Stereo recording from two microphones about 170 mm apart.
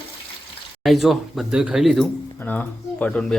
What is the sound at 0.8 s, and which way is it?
Speech, centre (ahead or behind).